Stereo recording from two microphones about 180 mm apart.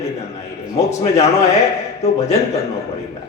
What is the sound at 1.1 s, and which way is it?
A man's voice, 35° left (ahead or behind).